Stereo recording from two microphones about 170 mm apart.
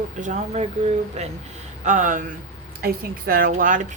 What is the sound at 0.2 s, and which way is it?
Speech, 40° right (ahead or behind).